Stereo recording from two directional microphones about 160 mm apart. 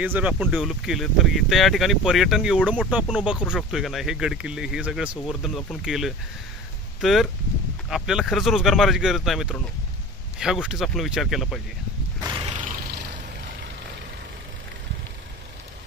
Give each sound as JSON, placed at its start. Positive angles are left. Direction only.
{"t": 0.0, "sound": "speech", "side_deg": -10}
{"t": 12.2, "sound": "horse", "side_deg": -25}
{"t": 12.4, "sound": "a sound", "side_deg": -50}